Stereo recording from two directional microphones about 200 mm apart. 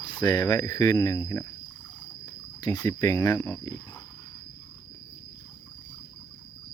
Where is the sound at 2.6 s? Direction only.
20° left (ahead or behind).